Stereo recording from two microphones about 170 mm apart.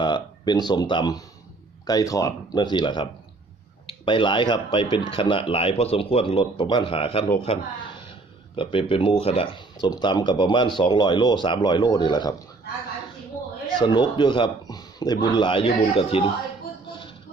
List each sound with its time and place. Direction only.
0.0 s speech: 25° left (ahead or behind)
8.5 s speech: 35° left (ahead or behind)
13.7 s speech: 25° left (ahead or behind)